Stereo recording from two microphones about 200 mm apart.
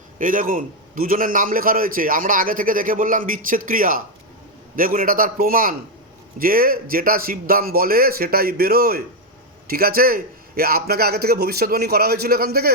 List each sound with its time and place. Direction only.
0.2 s a man's voice: 40° right (ahead or behind)